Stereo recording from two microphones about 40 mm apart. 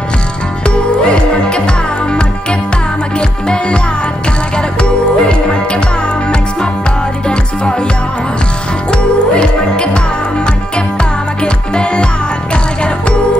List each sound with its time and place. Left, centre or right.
0.7 s music: left
5.3 s music: left
8.9 s music: left